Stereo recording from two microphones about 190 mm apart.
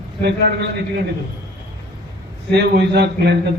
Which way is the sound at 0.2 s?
60° right (ahead or behind).